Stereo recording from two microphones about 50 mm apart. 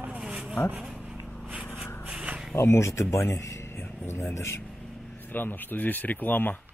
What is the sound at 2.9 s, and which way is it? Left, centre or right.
Speech, left.